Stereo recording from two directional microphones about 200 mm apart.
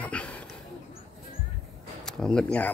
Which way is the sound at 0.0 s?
5° left (ahead or behind).